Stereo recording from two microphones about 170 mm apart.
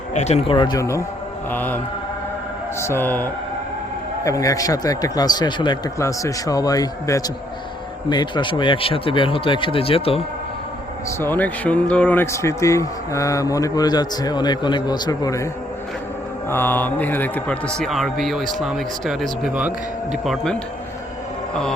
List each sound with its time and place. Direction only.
0.1 s speech: 40° left (ahead or behind); by 1.8 s 10° left (ahead or behind)
2.8 s speech: 15° left (ahead or behind); by 10.2 s 35° left (ahead or behind)
11.2 s speech: 10° left (ahead or behind)
16.5 s a man's voice: 10° left (ahead or behind)